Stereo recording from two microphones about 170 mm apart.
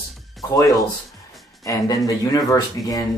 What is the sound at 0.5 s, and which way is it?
Speech, 20° left (ahead or behind).